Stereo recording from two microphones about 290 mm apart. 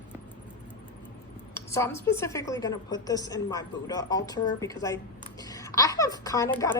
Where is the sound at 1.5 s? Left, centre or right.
Centre.